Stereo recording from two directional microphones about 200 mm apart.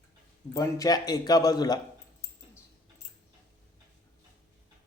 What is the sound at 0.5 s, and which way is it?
Speech, 15° left (ahead or behind).